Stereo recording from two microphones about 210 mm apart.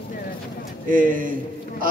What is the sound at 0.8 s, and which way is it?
Speech, 40° right (ahead or behind).